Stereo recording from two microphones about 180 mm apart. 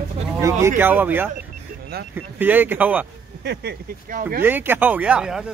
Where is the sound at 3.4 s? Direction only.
65° right (ahead or behind); by 4.4 s 50° right (ahead or behind).